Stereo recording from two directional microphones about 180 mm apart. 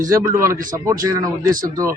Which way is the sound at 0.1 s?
15° right (ahead or behind).